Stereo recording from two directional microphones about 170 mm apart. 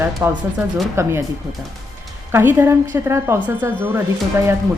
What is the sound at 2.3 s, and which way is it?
Speech, 10° right (ahead or behind).